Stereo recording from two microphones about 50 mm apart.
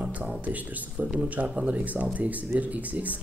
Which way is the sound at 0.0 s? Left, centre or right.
Right.